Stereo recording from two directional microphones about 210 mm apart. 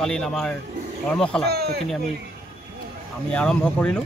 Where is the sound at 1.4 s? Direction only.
50° right (ahead or behind).